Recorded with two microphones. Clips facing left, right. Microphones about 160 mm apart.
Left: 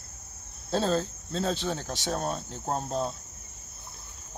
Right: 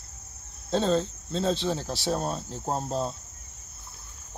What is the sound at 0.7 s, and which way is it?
Speech, 5° left (ahead or behind).